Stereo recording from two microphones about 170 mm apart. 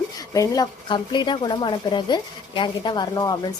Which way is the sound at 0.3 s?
20° left (ahead or behind).